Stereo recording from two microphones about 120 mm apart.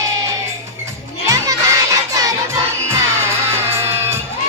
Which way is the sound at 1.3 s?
25° right (ahead or behind).